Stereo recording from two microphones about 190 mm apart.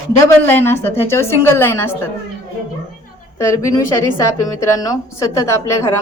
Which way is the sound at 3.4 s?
15° left (ahead or behind).